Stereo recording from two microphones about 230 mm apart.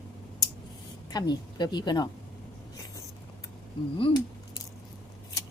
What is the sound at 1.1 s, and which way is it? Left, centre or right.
Speech, centre.